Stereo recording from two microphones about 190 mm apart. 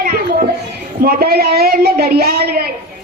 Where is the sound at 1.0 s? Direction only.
55° right (ahead or behind).